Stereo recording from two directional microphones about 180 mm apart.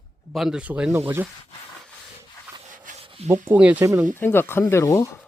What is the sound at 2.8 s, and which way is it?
Rub, 35° right (ahead or behind).